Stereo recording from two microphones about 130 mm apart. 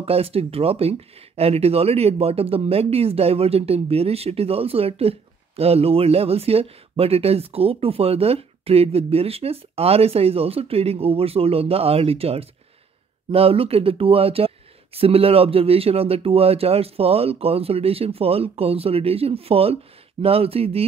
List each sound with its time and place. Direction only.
0.0 s speech: 50° right (ahead or behind)